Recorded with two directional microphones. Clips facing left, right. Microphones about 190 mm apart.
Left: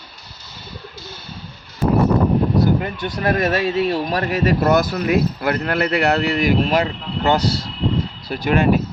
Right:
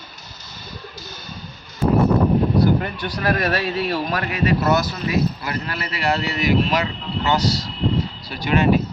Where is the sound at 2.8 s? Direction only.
25° left (ahead or behind).